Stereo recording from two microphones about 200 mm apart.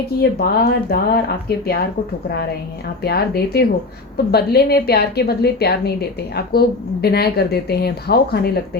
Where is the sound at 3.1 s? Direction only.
50° left (ahead or behind).